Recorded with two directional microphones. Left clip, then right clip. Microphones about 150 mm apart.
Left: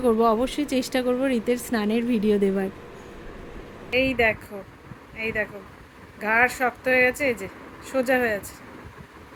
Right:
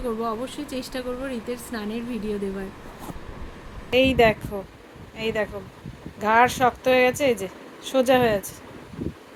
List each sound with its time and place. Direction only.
0.0 s speech: 40° left (ahead or behind)
4.0 s a woman's voice: 50° right (ahead or behind)
6.2 s speech: 20° right (ahead or behind)